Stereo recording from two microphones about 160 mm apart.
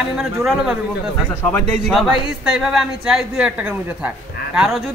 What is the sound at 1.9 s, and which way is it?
A woman's voice, centre (ahead or behind).